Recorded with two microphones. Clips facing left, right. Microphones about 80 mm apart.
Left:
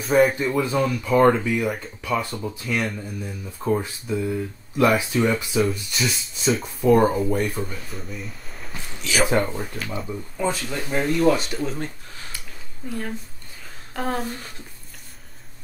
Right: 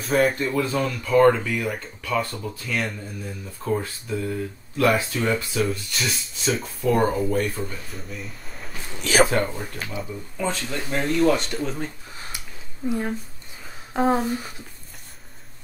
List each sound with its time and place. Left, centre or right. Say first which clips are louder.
0.2 s speech: left 3 dB; centre
5.9 s speech: left 2 dB; centre
6.8 s speech: left 4 dB; centre
7.9 s speech: left 1 dB; centre
9.3 s speech: left 2 dB; centre
9.8 s speech: left 2 dB; left
10.4 s speech: left 2 dB; centre
12.8 s a woman's voice: right 5 dB; centre
14.1 s speech: right 5 dB; centre